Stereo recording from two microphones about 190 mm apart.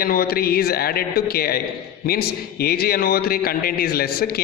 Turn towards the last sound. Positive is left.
turn(degrees=55)  # may be behind; listen again after turning